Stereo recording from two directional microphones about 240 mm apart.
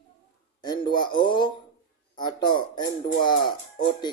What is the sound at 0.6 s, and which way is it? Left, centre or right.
Speech, centre.